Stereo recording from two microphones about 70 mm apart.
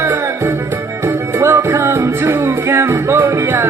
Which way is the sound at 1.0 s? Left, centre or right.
Right.